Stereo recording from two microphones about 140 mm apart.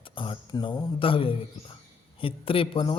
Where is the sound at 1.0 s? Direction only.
40° left (ahead or behind).